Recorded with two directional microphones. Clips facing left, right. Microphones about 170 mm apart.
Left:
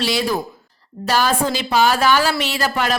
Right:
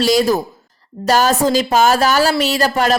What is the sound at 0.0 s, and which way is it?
Speech, 40° right (ahead or behind).